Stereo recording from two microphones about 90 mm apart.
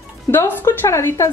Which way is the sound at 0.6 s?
25° left (ahead or behind).